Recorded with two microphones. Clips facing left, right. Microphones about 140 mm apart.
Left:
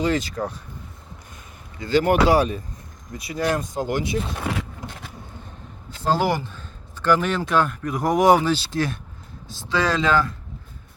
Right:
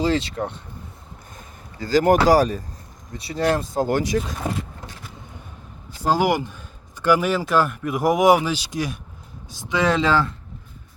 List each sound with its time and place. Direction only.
0.0 s speech: 30° right (ahead or behind)
1.8 s speech: 35° right (ahead or behind)
6.0 s speech: 10° right (ahead or behind); by 10.3 s 30° right (ahead or behind)